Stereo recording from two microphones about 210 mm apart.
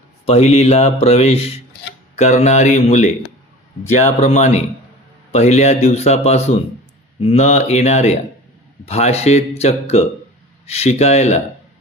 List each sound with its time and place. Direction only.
0.3 s speech: 30° left (ahead or behind)